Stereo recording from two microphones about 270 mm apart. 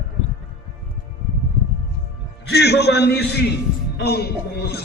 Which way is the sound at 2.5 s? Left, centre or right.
Left.